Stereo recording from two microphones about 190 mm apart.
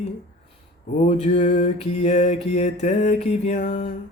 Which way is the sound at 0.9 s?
35° left (ahead or behind).